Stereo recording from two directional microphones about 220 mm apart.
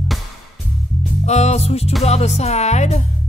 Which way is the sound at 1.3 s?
30° left (ahead or behind).